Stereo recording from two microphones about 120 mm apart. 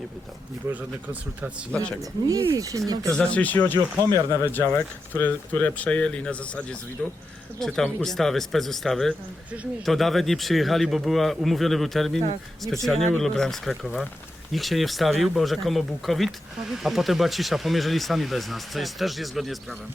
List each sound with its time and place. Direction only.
0.7 s speech: 15° right (ahead or behind)
2.0 s speech: 30° right (ahead or behind)
3.1 s speech: 10° left (ahead or behind)